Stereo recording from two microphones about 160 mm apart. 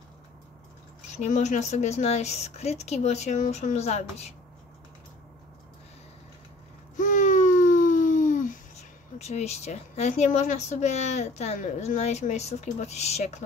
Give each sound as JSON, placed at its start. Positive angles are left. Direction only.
{"t": 1.1, "sound": "a woman's voice", "side_deg": 45}
{"t": 7.0, "sound": "a sound", "side_deg": 55}
{"t": 9.2, "sound": "a woman's voice", "side_deg": 45}